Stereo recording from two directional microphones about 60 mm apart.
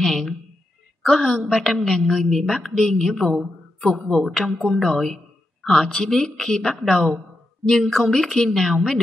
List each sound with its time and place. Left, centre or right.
0.0 s a woman's voice: centre